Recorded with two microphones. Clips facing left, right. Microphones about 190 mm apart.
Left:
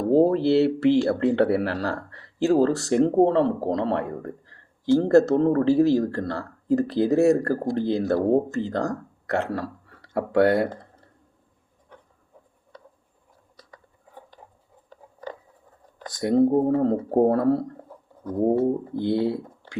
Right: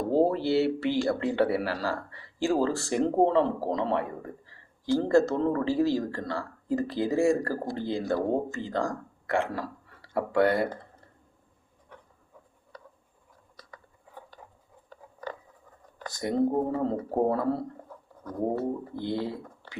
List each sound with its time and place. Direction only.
0.1 s speech: 60° left (ahead or behind)
8.9 s speech: 40° left (ahead or behind)
10.0 s speech: 60° left (ahead or behind)
12.7 s a sound: 25° left (ahead or behind)
14.8 s a sound: 20° left (ahead or behind)
16.2 s speech: 55° left (ahead or behind)
17.8 s bird: 25° left (ahead or behind)
18.9 s speech: 70° left (ahead or behind)